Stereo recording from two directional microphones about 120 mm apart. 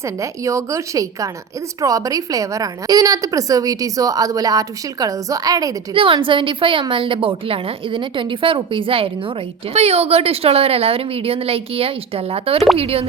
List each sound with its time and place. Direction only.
0.0 s a woman's voice: 25° right (ahead or behind)
5.9 s a woman's voice: 45° right (ahead or behind)
9.7 s a woman's voice: 60° right (ahead or behind)